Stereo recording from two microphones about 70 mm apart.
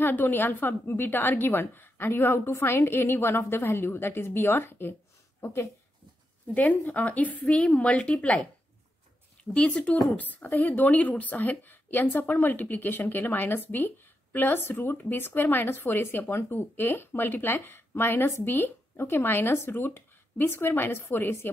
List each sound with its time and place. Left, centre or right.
0.0 s a woman's voice: left
6.5 s speech: left
9.4 s speech: centre; by 21.5 s left